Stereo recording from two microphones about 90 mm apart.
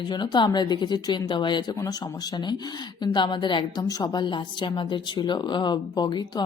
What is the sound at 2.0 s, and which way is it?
A woman's voice, 50° left (ahead or behind).